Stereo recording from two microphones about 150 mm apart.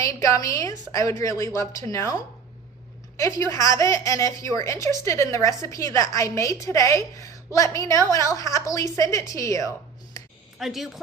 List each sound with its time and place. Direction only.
0.0 s a woman's voice: 20° left (ahead or behind)
10.6 s speech: centre (ahead or behind)